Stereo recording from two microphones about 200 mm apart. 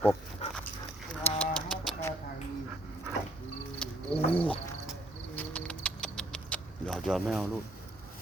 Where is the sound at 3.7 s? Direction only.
5° left (ahead or behind).